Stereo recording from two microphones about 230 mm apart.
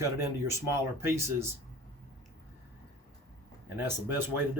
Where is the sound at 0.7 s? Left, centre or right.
Centre.